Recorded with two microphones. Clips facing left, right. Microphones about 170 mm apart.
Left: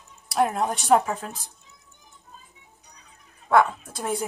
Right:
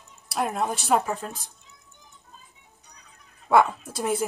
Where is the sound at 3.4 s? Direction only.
10° right (ahead or behind).